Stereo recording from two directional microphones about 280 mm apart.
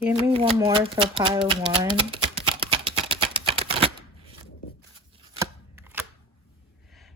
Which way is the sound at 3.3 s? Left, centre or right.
Centre.